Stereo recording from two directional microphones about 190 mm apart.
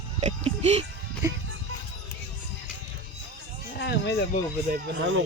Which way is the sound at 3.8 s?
65° left (ahead or behind).